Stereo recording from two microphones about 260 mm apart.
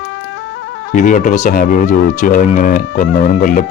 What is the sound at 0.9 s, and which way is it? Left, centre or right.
A man's voice, left.